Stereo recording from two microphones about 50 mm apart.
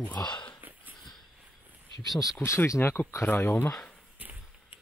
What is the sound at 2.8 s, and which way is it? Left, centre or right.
Speech, left.